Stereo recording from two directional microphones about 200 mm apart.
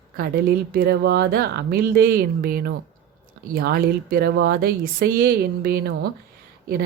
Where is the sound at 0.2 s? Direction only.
45° right (ahead or behind).